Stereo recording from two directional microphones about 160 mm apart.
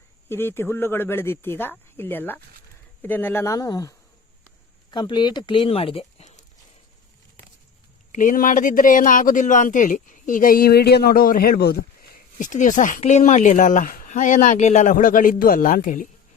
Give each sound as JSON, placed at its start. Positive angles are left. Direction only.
{"t": 0.3, "sound": "speech", "side_deg": 15}
{"t": 8.1, "sound": "speech", "side_deg": 55}